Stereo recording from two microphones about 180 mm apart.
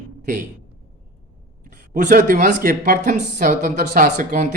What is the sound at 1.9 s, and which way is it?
Speech, 50° right (ahead or behind).